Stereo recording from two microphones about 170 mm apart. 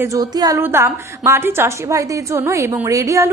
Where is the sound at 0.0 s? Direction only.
20° right (ahead or behind).